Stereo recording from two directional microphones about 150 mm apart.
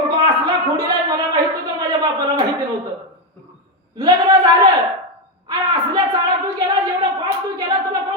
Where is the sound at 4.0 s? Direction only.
25° right (ahead or behind).